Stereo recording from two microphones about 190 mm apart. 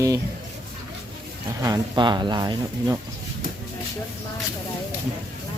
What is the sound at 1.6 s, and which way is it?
Speech, 20° right (ahead or behind).